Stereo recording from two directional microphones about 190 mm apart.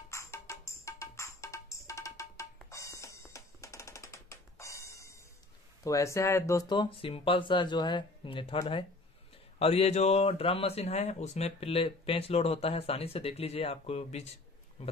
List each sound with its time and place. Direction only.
0.1 s music: 15° left (ahead or behind)
5.9 s speech: 15° left (ahead or behind); by 14.9 s 30° left (ahead or behind)